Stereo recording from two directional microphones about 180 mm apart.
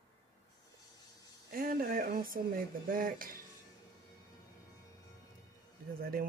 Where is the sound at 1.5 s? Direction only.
50° right (ahead or behind).